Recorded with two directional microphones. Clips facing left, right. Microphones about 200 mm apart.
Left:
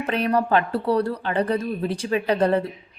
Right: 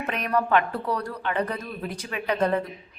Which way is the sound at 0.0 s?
30° left (ahead or behind).